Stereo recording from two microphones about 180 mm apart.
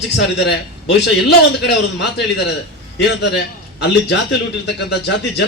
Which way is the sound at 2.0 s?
70° left (ahead or behind).